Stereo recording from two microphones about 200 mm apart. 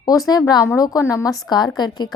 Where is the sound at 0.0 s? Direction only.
20° left (ahead or behind).